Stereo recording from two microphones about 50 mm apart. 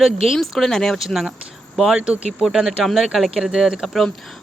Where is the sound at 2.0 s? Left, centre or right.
Right.